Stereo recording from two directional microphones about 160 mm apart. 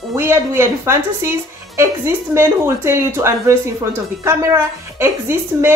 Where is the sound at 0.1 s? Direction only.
15° right (ahead or behind).